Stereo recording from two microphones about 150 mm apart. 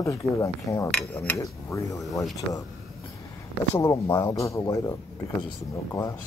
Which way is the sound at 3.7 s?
20° left (ahead or behind).